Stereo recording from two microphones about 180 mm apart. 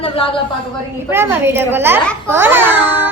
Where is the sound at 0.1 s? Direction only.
30° left (ahead or behind).